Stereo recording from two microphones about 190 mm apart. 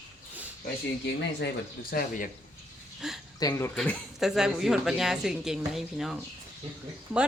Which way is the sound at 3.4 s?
15° left (ahead or behind).